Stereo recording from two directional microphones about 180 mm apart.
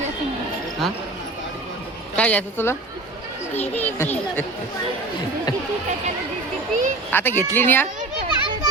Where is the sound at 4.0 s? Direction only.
10° left (ahead or behind).